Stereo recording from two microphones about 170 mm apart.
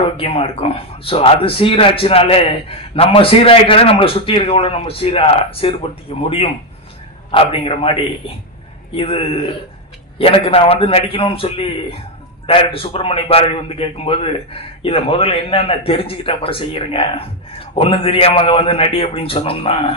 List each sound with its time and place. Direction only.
0.2 s a man's voice: 35° left (ahead or behind)